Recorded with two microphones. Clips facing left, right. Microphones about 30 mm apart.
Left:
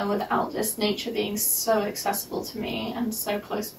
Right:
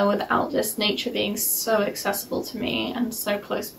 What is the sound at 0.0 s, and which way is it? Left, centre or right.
Speech, right.